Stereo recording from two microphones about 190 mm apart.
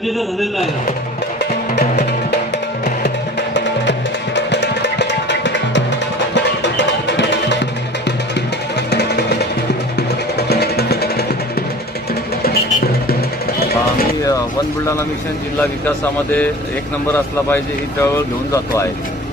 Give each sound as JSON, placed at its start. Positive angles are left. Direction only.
{"t": 4.4, "sound": "music", "side_deg": 65}
{"t": 8.9, "sound": "music", "side_deg": 60}
{"t": 12.4, "sound": "music", "side_deg": 55}
{"t": 17.1, "sound": "speech", "side_deg": 10}